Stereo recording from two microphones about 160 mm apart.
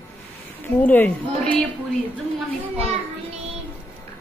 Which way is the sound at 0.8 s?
10° left (ahead or behind).